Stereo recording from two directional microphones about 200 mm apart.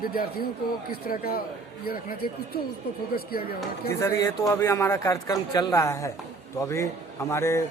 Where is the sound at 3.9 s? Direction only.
15° left (ahead or behind).